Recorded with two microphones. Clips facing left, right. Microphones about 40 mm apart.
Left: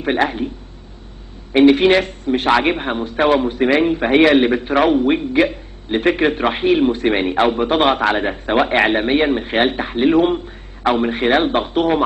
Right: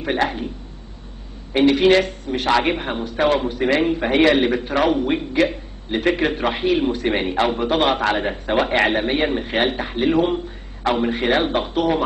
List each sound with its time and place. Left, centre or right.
0.0 s a man's voice: centre
1.5 s a man's voice: left
4.6 s a man's voice: left
4.9 s a man's voice: centre
7.7 s a man's voice: left
8.0 s a man's voice: centre